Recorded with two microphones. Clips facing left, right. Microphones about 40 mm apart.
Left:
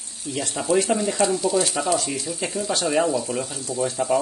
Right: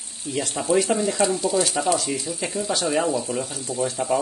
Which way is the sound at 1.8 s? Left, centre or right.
Centre.